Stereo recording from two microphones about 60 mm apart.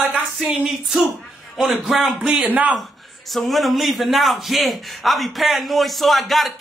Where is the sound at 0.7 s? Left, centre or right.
Centre.